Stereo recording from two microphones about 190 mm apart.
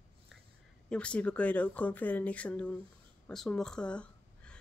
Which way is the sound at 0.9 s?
5° left (ahead or behind).